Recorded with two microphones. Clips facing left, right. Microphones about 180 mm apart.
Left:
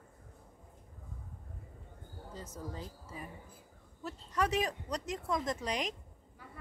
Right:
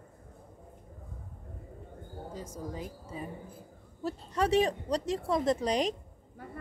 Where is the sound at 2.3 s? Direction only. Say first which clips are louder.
Right 3 dB; 10° right (ahead or behind).